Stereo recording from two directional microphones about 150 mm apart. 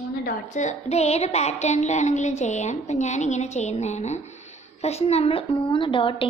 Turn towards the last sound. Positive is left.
turn(degrees=35)  # may be behind; listen again after turning